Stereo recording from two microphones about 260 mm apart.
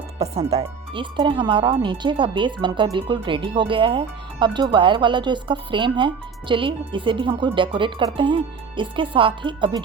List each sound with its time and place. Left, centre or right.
0.2 s speech: right